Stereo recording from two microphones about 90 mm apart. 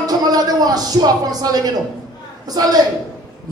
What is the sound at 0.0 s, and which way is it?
A woman's voice, 45° right (ahead or behind).